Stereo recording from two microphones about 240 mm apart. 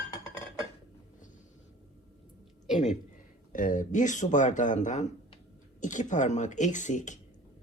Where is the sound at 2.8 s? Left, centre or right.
Left.